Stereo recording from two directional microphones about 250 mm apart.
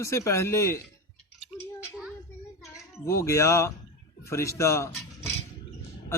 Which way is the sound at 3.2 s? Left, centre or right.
Centre.